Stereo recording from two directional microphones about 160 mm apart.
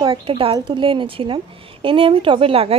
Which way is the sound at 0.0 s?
35° right (ahead or behind).